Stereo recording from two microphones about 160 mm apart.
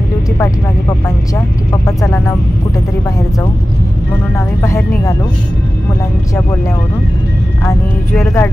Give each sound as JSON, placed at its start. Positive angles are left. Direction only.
{"t": 0.4, "sound": "speech", "side_deg": 20}
{"t": 4.6, "sound": "speech", "side_deg": 20}
{"t": 7.6, "sound": "speech", "side_deg": 15}